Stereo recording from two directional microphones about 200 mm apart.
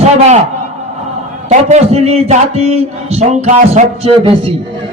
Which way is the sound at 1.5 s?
35° right (ahead or behind).